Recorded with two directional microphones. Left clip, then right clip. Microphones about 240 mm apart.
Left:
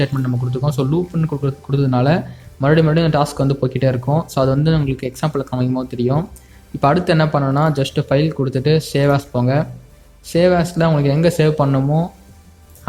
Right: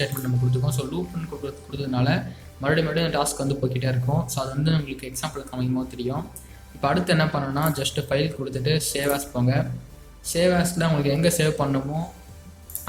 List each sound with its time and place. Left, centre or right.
0.5 s speech: left